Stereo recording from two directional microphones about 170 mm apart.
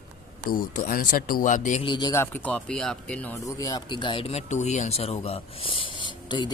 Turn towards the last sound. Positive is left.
turn(degrees=25)  # may be behind; listen again after turning